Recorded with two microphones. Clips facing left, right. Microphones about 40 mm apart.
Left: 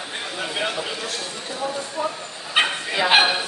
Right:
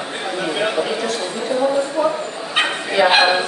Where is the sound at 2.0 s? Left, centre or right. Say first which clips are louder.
Right 6 dB; right.